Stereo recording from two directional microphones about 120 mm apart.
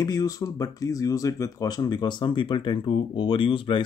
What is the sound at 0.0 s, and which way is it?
Speech, 30° left (ahead or behind).